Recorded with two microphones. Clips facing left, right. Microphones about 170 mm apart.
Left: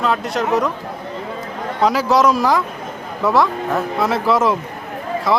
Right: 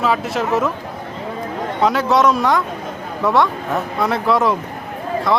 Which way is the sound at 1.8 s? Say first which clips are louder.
Even; centre (ahead or behind).